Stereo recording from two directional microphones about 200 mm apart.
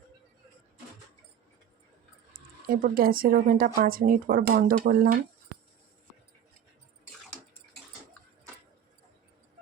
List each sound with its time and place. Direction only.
2.3 s speech: 45° right (ahead or behind)